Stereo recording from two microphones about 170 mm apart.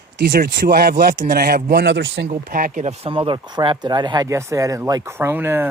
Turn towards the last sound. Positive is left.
turn(degrees=-15)  # may be behind; listen again after turning